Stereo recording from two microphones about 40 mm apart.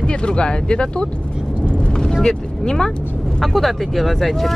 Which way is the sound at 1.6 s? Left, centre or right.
Left.